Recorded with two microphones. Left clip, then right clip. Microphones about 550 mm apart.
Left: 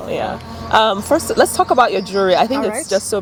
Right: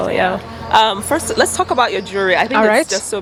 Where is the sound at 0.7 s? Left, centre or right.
Left.